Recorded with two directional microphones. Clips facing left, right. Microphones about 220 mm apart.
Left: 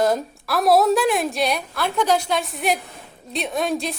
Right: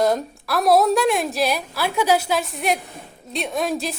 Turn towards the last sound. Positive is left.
turn(degrees=0)  # may be behind; listen again after turning